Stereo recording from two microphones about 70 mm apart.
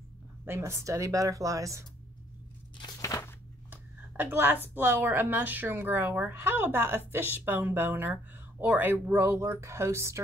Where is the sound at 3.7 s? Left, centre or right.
Right.